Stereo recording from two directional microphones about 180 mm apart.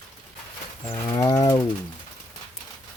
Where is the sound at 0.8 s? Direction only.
30° left (ahead or behind).